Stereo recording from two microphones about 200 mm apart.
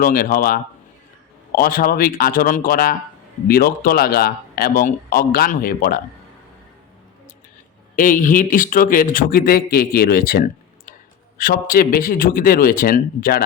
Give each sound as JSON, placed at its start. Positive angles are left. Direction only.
{"t": 0.0, "sound": "speech", "side_deg": 45}
{"t": 7.9, "sound": "speech", "side_deg": 40}